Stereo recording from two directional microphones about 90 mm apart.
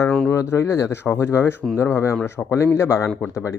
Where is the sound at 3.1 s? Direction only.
10° left (ahead or behind).